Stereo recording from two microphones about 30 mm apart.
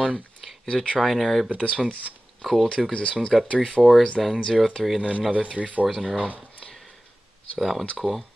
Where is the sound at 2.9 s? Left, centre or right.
Left.